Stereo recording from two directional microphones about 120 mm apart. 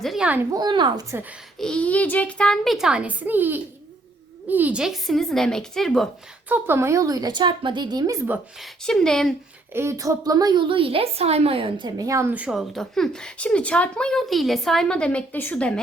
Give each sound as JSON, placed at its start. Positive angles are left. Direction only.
{"t": 0.0, "sound": "a child's voice", "side_deg": 0}
{"t": 0.5, "sound": "a woman's voice", "side_deg": -40}
{"t": 1.5, "sound": "a child's voice", "side_deg": 5}
{"t": 6.5, "sound": "a woman's voice", "side_deg": -20}
{"t": 8.6, "sound": "a child's voice", "side_deg": 5}
{"t": 9.7, "sound": "a woman's voice", "side_deg": -25}
{"t": 12.3, "sound": "a woman's voice", "side_deg": -10}
{"t": 12.5, "sound": "speech", "side_deg": 0}